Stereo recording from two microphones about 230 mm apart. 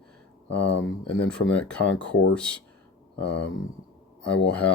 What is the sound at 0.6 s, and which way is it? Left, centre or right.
Speech, left.